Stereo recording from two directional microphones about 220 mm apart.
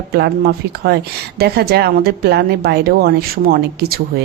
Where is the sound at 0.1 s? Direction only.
45° right (ahead or behind).